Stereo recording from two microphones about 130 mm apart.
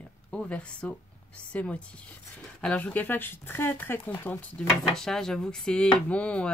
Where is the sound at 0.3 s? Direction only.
10° left (ahead or behind).